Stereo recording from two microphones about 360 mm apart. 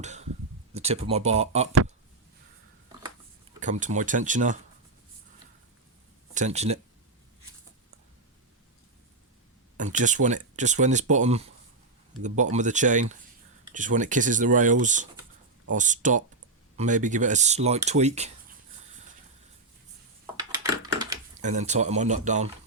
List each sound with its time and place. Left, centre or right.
0.0 s speech: centre
3.6 s speech: centre
6.3 s speech: centre
9.7 s speech: right
20.8 s a sound: centre